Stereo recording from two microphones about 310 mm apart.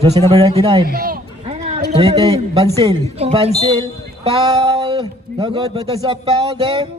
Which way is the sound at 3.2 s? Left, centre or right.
Centre.